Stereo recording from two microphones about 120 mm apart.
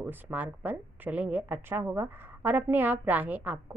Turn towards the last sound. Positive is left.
turn(degrees=-15)  # may be behind; listen again after turning